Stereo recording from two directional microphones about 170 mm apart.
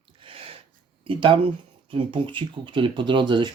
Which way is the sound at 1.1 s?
30° right (ahead or behind).